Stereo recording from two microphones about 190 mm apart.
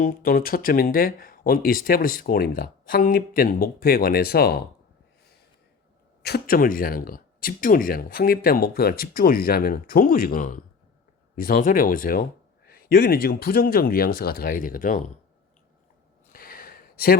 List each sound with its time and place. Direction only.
0.0 s speech: 50° left (ahead or behind)
6.2 s speech: 55° left (ahead or behind)
16.3 s a sound: 50° left (ahead or behind)